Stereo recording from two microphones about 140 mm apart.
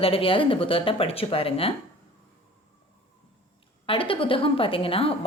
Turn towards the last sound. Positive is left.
turn(degrees=40)  # may be behind; listen again after turning